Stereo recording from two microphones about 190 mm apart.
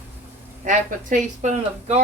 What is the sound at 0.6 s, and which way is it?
Speech, 40° right (ahead or behind).